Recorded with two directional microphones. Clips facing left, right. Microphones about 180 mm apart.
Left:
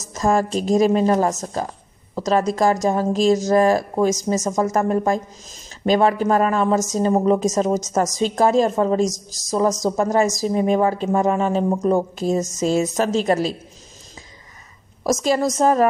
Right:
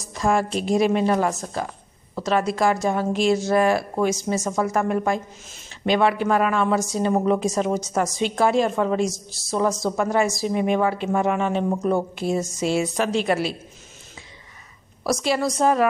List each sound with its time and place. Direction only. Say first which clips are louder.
0.0 s speech: left 2 dB; 40° left (ahead or behind)
15.0 s a woman's voice: left 3 dB; 45° left (ahead or behind)